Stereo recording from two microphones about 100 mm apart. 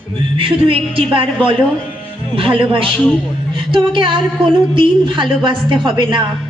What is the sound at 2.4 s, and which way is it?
A woman's voice, 60° right (ahead or behind).